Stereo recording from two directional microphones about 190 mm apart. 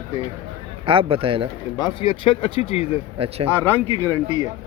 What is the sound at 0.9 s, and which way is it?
Speech, 30° right (ahead or behind).